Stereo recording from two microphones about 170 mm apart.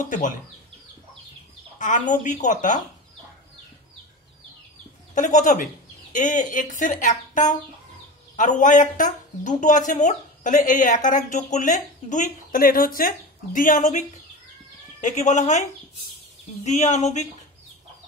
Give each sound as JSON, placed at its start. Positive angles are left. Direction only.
{"t": 0.0, "sound": "speech", "side_deg": 45}
{"t": 1.8, "sound": "speech", "side_deg": 50}
{"t": 5.1, "sound": "speech", "side_deg": 45}
{"t": 16.6, "sound": "speech", "side_deg": 45}